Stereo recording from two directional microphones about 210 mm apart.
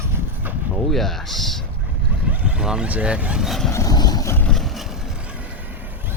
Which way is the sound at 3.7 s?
15° left (ahead or behind).